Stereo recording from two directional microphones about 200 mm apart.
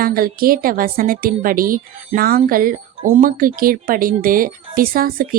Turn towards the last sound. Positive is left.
turn(degrees=-45)  # may be behind; listen again after turning